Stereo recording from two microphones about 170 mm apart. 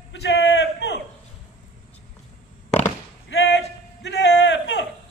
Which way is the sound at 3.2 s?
90° left.